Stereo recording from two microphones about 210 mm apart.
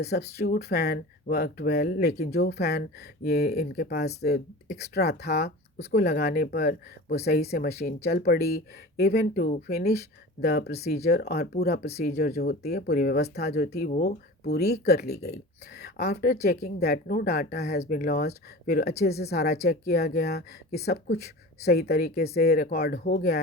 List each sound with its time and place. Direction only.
0.0 s speech: 50° left (ahead or behind)